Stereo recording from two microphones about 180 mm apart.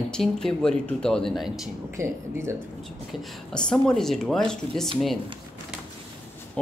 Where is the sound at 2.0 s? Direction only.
15° right (ahead or behind).